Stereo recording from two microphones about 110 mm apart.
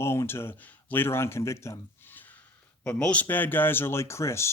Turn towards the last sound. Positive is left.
turn(degrees=25)  # may be behind; listen again after turning